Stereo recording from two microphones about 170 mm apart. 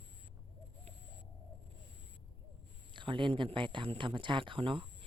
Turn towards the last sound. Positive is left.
turn(degrees=-30)  # may be behind; listen again after turning